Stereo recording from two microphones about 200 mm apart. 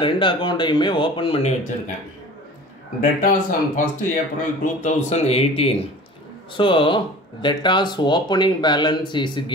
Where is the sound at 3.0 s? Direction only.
40° left (ahead or behind).